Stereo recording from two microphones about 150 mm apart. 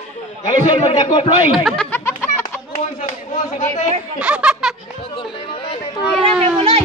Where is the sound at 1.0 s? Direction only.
30° left (ahead or behind).